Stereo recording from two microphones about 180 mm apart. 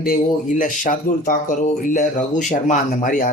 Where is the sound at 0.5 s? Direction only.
45° left (ahead or behind).